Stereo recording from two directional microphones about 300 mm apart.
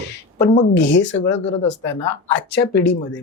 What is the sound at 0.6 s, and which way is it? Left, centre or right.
Speech, left.